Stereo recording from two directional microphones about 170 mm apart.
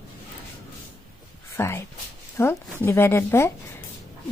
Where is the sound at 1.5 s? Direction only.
15° left (ahead or behind).